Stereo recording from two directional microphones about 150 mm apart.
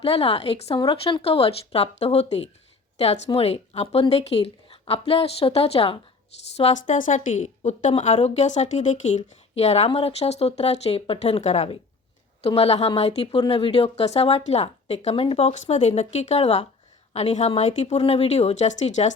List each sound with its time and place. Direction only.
0.0 s a woman's voice: 40° left (ahead or behind)